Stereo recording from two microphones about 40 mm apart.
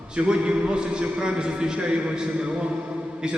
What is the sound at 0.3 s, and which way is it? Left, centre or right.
A man's voice, right.